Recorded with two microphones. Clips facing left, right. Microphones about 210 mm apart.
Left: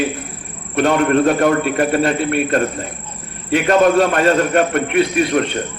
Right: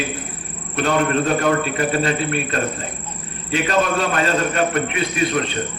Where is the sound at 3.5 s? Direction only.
55° left (ahead or behind).